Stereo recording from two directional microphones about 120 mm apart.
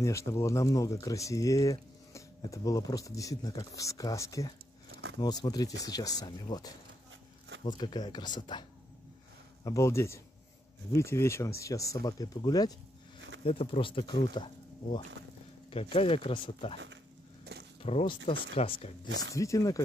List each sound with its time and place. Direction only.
0.0 s speech: 25° left (ahead or behind)
9.7 s speech: 25° left (ahead or behind)
13.4 s speech: 50° left (ahead or behind)
15.7 s speech: 55° left (ahead or behind)
17.8 s speech: 55° left (ahead or behind)
19.3 s speech: 25° left (ahead or behind)